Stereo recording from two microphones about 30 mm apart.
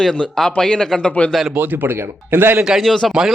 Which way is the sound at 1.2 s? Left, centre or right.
Left.